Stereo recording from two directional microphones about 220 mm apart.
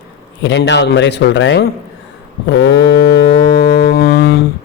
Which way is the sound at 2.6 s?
55° left (ahead or behind).